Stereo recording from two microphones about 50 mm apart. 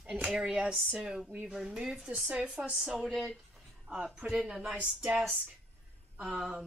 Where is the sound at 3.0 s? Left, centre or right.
Centre.